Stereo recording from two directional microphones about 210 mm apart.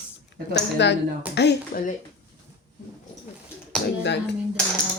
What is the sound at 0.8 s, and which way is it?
Speech, 55° left (ahead or behind).